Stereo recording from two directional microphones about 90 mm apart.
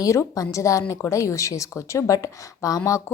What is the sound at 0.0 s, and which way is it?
A woman's voice, 35° left (ahead or behind).